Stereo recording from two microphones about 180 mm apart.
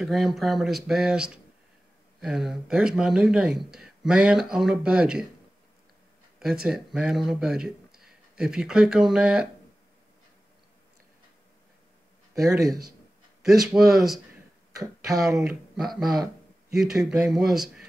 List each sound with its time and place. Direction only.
0.0 s speech: centre (ahead or behind)
6.4 s speech: 5° right (ahead or behind)
12.4 s speech: 20° right (ahead or behind)
13.6 s speech: centre (ahead or behind)
14.8 s speech: 20° right (ahead or behind)
15.2 s speech: centre (ahead or behind)